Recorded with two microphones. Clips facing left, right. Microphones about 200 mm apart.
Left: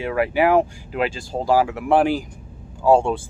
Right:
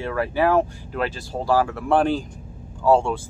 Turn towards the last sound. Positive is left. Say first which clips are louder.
# left 2 dB
turn(degrees=15)  # may be behind; listen again after turning